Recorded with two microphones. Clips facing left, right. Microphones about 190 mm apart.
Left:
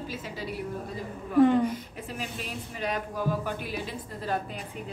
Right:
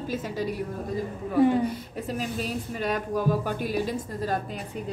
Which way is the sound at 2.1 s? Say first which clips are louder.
Right 7 dB; 40° right (ahead or behind).